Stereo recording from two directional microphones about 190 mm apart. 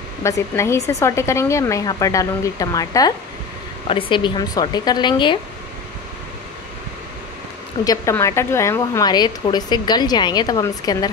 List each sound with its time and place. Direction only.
0.2 s a woman's voice: 15° left (ahead or behind)
7.8 s a woman's voice: 15° left (ahead or behind)